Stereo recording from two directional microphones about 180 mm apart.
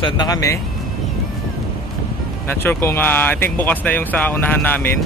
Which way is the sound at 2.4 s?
10° left (ahead or behind).